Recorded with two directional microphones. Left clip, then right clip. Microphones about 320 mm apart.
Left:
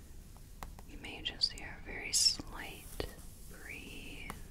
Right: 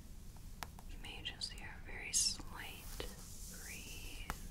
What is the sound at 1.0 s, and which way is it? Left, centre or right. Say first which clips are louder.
Whispering: left 9 dB; left.